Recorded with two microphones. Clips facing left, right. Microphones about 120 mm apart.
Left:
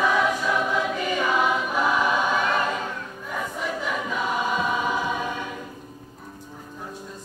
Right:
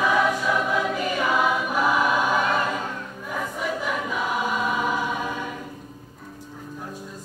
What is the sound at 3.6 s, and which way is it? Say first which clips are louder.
Choir: right 2 dB; 5° right (ahead or behind).